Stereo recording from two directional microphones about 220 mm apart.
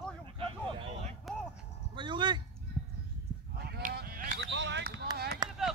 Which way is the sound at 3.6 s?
45° right (ahead or behind).